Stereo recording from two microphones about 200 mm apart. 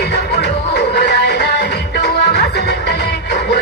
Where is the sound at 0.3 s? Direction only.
55° left (ahead or behind).